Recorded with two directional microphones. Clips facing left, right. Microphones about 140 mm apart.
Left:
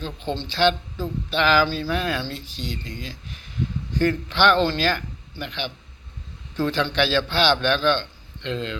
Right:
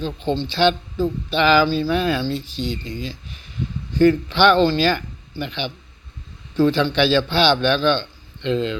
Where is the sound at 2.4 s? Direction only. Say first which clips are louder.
Right 7 dB; 40° left (ahead or behind).